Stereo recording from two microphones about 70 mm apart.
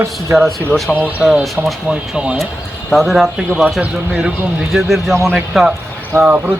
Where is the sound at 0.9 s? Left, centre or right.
Centre.